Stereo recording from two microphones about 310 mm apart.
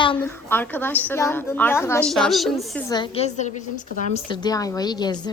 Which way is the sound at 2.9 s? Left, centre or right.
Centre.